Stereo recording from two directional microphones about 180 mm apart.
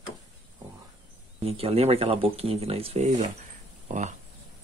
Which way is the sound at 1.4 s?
35° right (ahead or behind).